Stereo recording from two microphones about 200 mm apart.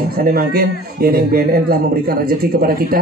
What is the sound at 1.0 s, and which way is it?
Speech, 50° right (ahead or behind).